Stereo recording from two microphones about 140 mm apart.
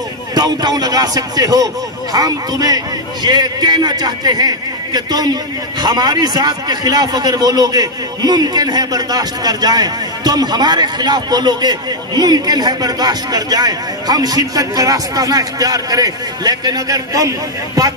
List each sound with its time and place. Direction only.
0.3 s a man's voice: 30° right (ahead or behind)